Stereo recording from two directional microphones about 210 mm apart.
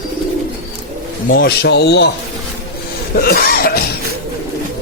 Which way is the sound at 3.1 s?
45° left (ahead or behind).